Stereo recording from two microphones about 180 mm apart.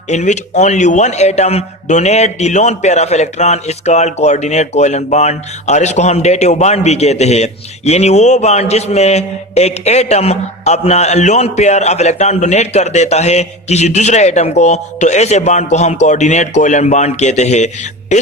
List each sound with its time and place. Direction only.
0.1 s a man's voice: 40° left (ahead or behind)